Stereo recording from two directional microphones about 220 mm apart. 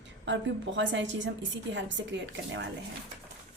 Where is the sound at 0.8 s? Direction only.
55° right (ahead or behind).